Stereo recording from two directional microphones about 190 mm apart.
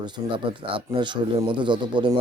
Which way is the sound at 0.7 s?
25° right (ahead or behind).